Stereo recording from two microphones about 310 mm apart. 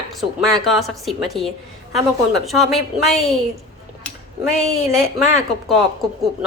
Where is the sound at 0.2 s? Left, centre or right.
Centre.